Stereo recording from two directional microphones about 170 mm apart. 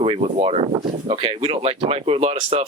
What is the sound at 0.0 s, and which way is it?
Speech, 35° right (ahead or behind).